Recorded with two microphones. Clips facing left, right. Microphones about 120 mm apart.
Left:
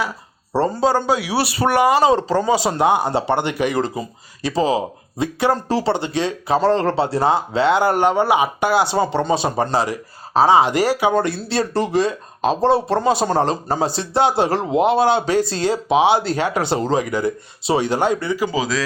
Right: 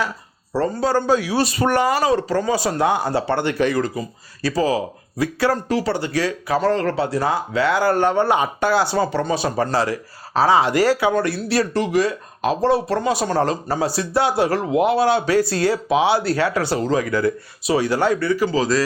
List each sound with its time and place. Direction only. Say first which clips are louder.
0.5 s speech: left 2 dB; 25° left (ahead or behind)
3.8 s speech: left 1 dB; 25° left (ahead or behind)
11.1 s speech: even; 30° left (ahead or behind)